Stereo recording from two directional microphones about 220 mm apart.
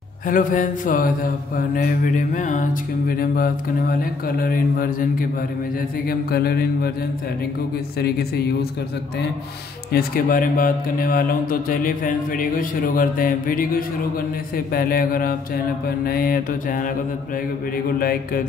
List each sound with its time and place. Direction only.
0.3 s speech: 35° left (ahead or behind)
6.0 s mantra: 45° left (ahead or behind)
8.0 s mantra: 45° left (ahead or behind)
9.9 s speech: 40° left (ahead or behind)
17.9 s speech: 40° left (ahead or behind)